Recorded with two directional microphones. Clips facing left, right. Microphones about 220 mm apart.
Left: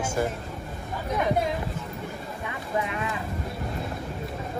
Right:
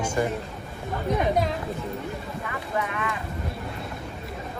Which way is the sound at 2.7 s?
25° left (ahead or behind).